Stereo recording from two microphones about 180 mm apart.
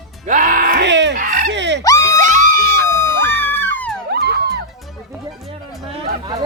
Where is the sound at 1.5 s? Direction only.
75° right (ahead or behind).